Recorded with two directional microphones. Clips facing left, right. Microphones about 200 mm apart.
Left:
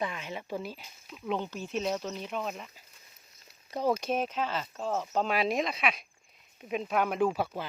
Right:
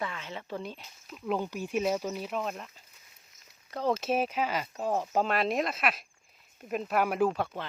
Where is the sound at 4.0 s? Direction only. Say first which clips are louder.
Right 2 dB; 5° right (ahead or behind).